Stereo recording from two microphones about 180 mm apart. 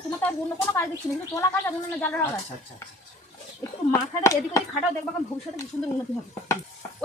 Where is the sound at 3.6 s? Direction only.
15° left (ahead or behind).